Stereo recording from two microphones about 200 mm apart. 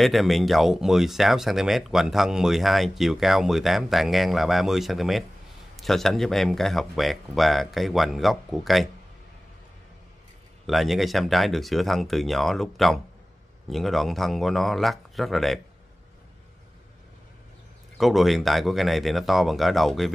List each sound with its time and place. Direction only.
0.0 s speech: centre (ahead or behind)
10.7 s speech: centre (ahead or behind)
17.9 s speech: centre (ahead or behind)